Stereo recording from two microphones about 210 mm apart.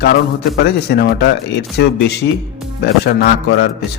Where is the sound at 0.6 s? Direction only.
50° left (ahead or behind).